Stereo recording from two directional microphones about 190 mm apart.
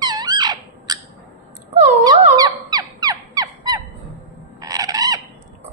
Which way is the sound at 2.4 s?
20° right (ahead or behind).